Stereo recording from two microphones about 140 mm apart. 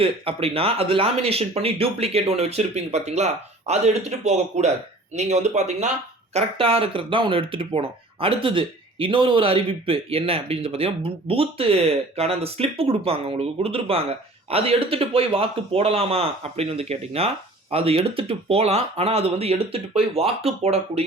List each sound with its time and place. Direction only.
0.0 s speech: 45° right (ahead or behind)
6.3 s speech: 40° right (ahead or behind)